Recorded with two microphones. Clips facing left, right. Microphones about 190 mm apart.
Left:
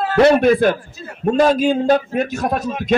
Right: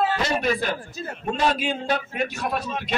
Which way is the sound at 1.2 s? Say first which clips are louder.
Left 10 dB; 40° left (ahead or behind).